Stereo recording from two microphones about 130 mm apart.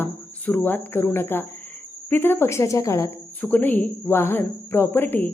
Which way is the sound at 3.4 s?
15° left (ahead or behind).